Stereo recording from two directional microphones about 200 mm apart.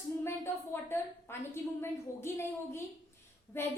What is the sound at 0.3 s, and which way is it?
A woman's voice, 10° left (ahead or behind).